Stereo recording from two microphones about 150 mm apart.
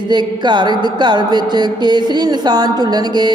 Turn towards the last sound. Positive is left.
turn(degrees=-30)  # may be behind; listen again after turning